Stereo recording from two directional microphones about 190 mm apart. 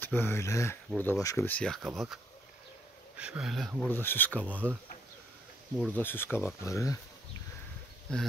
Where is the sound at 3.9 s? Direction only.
10° left (ahead or behind).